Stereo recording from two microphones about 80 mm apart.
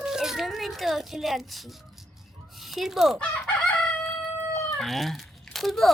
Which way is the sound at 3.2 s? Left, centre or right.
Centre.